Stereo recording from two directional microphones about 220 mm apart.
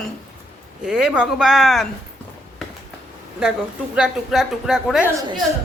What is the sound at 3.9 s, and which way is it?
A woman's voice, centre (ahead or behind).